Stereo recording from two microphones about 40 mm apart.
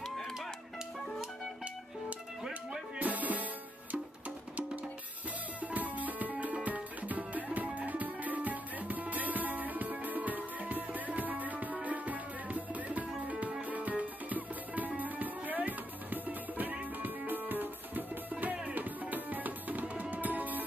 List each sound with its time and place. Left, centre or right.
0.0 s music: centre
3.0 s music: right
5.6 s music: right